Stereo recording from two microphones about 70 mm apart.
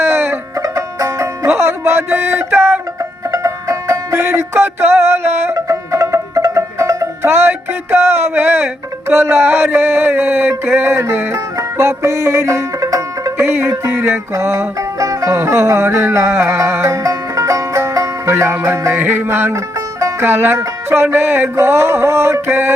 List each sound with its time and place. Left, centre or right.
0.0 s music: right
0.6 s music: right
1.5 s a sound: right
3.3 s music: right
5.6 s music: right
13.4 s music: right
19.5 s music: right
20.1 s music: right
22.4 s a sound: right